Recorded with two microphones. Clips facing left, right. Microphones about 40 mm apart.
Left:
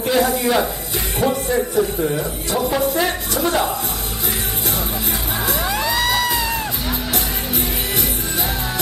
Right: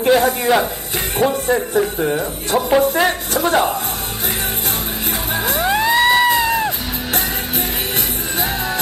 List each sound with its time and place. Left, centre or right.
0.0 s speech: right
2.8 s a sound: right
5.6 s music: right